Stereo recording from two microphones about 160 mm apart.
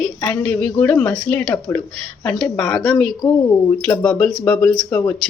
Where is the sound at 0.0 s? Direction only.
5° left (ahead or behind).